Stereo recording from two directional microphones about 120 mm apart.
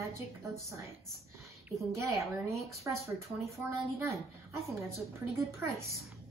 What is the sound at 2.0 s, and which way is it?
Speech, 25° right (ahead or behind).